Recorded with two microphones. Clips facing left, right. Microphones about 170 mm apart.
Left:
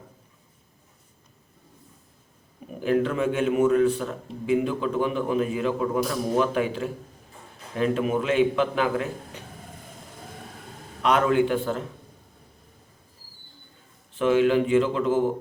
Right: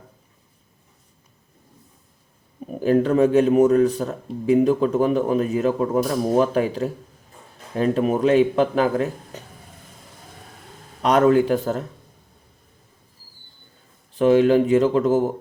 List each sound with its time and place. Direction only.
2.8 s speech: 40° right (ahead or behind)
11.0 s speech: 40° right (ahead or behind)
14.1 s speech: 40° right (ahead or behind)